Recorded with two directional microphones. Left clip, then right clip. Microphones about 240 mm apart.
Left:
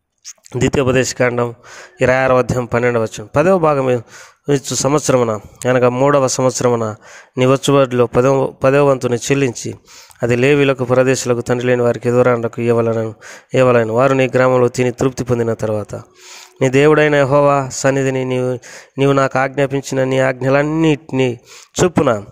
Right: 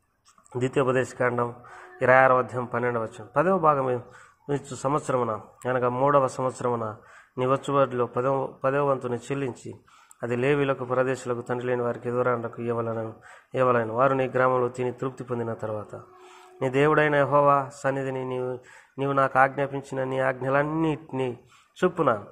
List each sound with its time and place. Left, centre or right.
0.6 s a man's voice: left